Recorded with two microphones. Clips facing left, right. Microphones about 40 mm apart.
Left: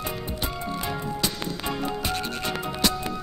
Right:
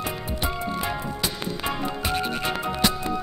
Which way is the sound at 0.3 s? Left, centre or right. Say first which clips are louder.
Right 3 dB; centre.